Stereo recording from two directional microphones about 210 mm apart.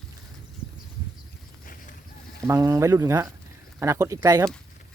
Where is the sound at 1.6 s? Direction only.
40° left (ahead or behind).